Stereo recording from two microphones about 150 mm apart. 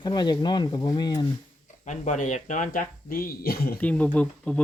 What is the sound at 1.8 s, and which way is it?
Speech, 50° left (ahead or behind).